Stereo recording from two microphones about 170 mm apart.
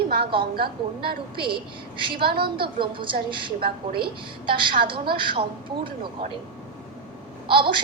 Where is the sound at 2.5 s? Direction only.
30° right (ahead or behind).